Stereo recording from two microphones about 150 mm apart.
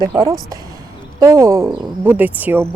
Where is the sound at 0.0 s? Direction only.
25° right (ahead or behind).